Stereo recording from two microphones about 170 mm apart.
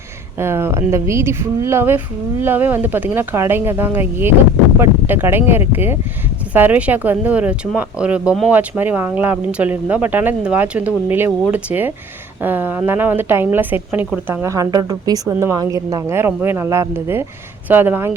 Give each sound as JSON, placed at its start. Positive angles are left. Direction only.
{"t": 0.3, "sound": "speech", "side_deg": -15}